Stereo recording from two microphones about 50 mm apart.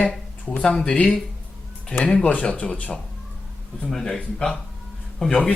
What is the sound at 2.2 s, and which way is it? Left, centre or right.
Speech, left.